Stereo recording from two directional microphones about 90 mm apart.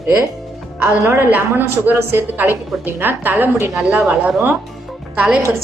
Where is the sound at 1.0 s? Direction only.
35° right (ahead or behind).